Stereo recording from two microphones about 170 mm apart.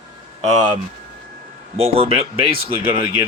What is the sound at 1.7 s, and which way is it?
Speech, 35° right (ahead or behind).